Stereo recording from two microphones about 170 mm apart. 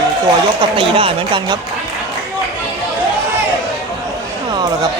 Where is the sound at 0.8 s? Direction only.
35° right (ahead or behind).